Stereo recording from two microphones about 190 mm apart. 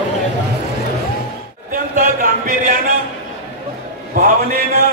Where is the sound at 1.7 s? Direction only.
45° right (ahead or behind).